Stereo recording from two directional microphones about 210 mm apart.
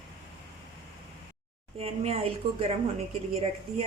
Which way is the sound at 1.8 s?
30° right (ahead or behind).